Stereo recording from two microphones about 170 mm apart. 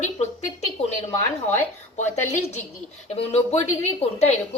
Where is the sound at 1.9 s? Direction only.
45° left (ahead or behind).